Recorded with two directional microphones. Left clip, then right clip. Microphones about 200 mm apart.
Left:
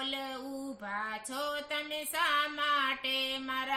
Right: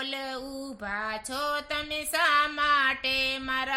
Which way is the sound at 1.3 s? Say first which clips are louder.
Right 5 dB; 40° right (ahead or behind).